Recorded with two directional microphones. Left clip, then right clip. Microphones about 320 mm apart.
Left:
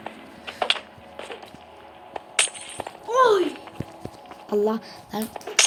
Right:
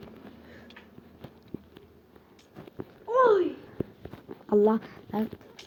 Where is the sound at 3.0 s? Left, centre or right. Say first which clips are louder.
Left 3 dB; centre.